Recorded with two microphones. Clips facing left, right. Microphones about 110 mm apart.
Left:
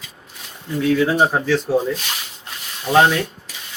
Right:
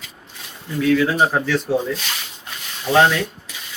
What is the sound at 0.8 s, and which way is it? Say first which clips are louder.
Speech: even; 25° left (ahead or behind).